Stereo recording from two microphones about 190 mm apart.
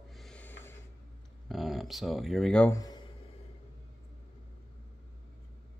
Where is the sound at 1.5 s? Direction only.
Centre (ahead or behind).